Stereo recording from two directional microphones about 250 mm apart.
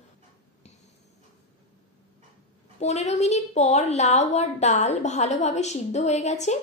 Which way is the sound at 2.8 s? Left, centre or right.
Left.